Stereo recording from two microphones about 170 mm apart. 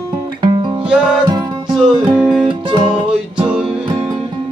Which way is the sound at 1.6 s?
5° right (ahead or behind).